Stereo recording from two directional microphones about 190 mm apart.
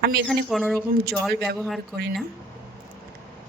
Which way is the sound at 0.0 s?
60° right (ahead or behind).